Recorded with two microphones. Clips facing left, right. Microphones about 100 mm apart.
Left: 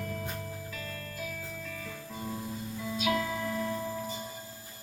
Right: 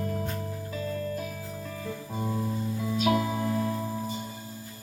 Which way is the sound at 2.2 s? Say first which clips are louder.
Right 7 dB; 30° right (ahead or behind).